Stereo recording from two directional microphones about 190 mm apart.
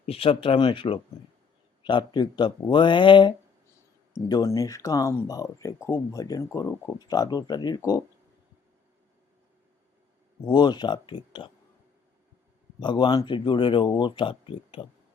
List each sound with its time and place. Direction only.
0.0 s speech: 30° left (ahead or behind)
10.4 s speech: 25° left (ahead or behind)
12.8 s speech: 25° left (ahead or behind)